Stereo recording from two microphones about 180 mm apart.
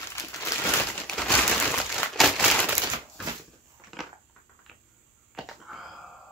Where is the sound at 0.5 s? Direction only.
20° left (ahead or behind).